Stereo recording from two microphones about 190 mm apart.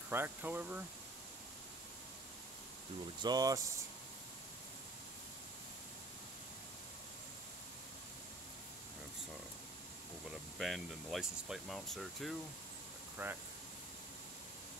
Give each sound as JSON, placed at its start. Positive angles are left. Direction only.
{"t": 0.1, "sound": "speech", "side_deg": -10}
{"t": 3.2, "sound": "speech", "side_deg": -20}
{"t": 10.6, "sound": "speech", "side_deg": 0}
{"t": 13.2, "sound": "speech", "side_deg": -10}